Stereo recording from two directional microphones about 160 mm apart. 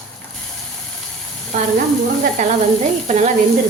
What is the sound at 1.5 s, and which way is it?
Speech, 55° right (ahead or behind).